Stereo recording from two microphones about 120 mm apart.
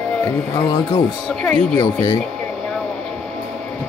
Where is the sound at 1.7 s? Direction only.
30° left (ahead or behind).